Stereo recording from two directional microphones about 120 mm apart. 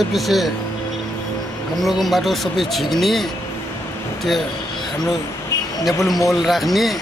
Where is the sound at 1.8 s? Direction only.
Centre (ahead or behind).